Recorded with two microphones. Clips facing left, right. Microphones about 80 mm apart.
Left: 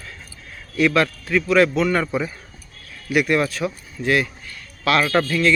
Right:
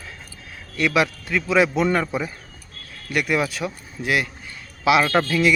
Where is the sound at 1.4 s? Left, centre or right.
Centre.